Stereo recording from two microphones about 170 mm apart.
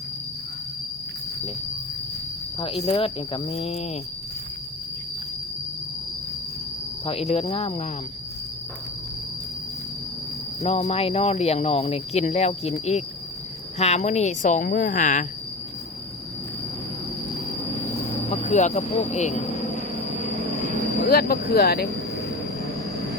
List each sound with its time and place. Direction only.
2.6 s speech: 30° left (ahead or behind)
7.3 s speech: 40° left (ahead or behind)
10.6 s speech: 40° left (ahead or behind)
13.7 s a woman's voice: 40° left (ahead or behind)
18.3 s speech: 45° left (ahead or behind)
21.1 s speech: 60° left (ahead or behind)